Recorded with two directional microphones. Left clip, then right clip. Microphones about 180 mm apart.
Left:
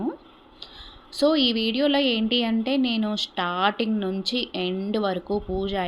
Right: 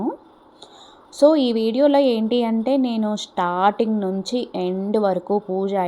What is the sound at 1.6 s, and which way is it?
A woman's voice, 10° right (ahead or behind).